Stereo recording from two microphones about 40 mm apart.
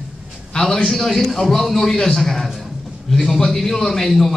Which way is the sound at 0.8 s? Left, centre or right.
Centre.